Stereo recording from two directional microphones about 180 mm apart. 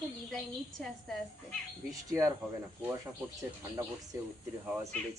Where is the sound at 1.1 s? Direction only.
5° left (ahead or behind).